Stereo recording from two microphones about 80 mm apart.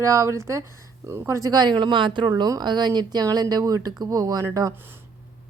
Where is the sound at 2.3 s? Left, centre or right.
Right.